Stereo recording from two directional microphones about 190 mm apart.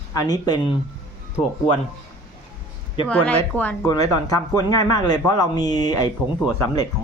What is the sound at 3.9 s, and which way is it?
Speech, 20° left (ahead or behind).